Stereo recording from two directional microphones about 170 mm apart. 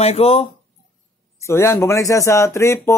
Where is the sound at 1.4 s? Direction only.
15° left (ahead or behind).